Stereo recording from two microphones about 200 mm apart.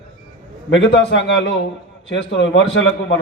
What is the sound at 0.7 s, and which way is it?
A man's voice, 65° left (ahead or behind).